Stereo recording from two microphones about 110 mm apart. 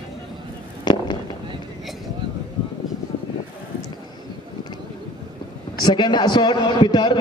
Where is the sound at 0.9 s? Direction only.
40° left (ahead or behind).